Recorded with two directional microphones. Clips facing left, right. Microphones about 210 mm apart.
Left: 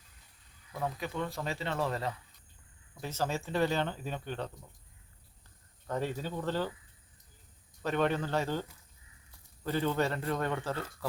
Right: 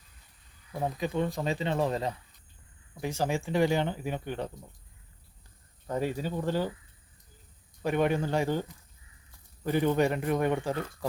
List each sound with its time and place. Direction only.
0.7 s speech: 30° right (ahead or behind)
0.9 s speech: 20° right (ahead or behind)
5.9 s speech: 10° right (ahead or behind)
7.8 s speech: 15° right (ahead or behind)
9.6 s speech: 15° right (ahead or behind)